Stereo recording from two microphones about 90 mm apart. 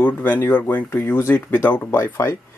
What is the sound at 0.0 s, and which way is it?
Speech, 25° left (ahead or behind).